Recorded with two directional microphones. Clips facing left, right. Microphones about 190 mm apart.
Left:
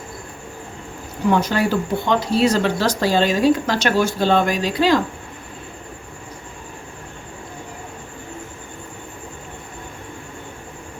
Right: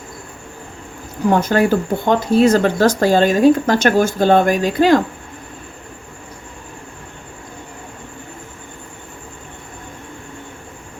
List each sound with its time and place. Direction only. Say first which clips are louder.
1.3 s speech: right 4 dB; 50° right (ahead or behind)